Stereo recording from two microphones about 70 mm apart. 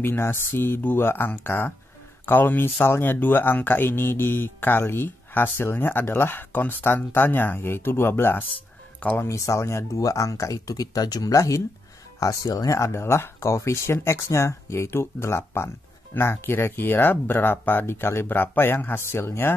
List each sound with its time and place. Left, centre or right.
0.0 s speech: left
9.2 s speech: left